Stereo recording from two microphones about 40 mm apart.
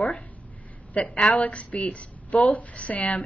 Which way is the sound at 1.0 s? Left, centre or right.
Left.